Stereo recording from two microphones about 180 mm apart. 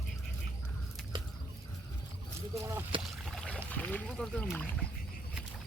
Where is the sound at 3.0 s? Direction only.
Centre (ahead or behind).